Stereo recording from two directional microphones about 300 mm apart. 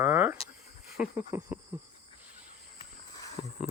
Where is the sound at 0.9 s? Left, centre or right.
Centre.